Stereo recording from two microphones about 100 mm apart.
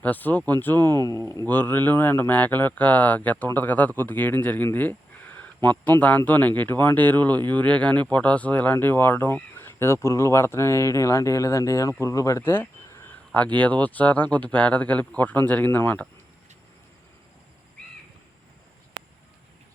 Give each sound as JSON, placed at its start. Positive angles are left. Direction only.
{"t": 0.0, "sound": "speech", "side_deg": 15}
{"t": 1.1, "sound": "speech", "side_deg": -35}
{"t": 1.5, "sound": "speech", "side_deg": 20}
{"t": 12.4, "sound": "speech", "side_deg": 20}